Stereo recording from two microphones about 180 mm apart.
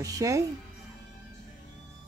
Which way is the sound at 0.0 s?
20° right (ahead or behind).